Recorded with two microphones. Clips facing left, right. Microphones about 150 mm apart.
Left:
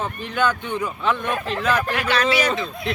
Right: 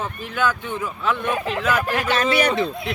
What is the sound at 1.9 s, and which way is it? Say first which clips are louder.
Speech: right 1 dB; 45° right (ahead or behind).